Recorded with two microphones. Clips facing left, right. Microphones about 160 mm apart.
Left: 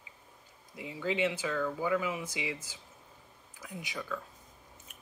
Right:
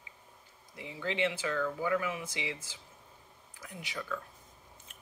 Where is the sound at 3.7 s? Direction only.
20° left (ahead or behind).